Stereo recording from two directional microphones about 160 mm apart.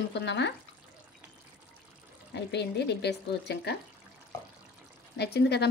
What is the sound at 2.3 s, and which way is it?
Speech, 90° left.